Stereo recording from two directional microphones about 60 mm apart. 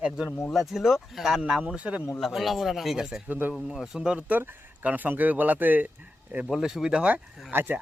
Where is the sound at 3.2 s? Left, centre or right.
Right.